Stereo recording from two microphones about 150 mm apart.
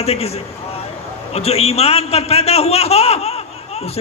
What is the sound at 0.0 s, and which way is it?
Speech, 45° left (ahead or behind).